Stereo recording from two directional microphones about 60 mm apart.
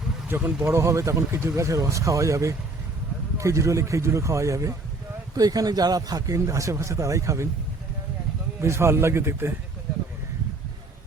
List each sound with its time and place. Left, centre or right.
0.3 s speech: right
5.3 s speech: right
8.6 s a man's voice: right